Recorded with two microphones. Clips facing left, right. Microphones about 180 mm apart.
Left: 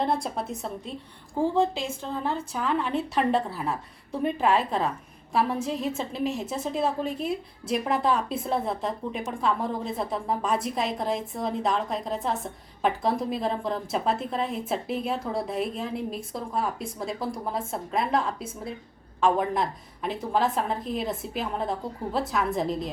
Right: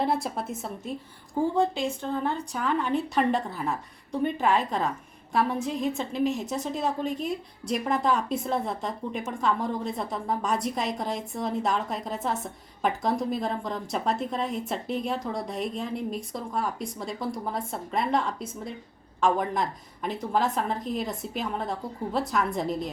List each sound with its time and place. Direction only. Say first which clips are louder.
0.0 s a woman's voice: even; 5° right (ahead or behind)
5.3 s a woman's voice: even; centre (ahead or behind)
6.1 s a woman's voice: right 4 dB; 35° left (ahead or behind)
6.5 s a woman's voice: left 1 dB; centre (ahead or behind)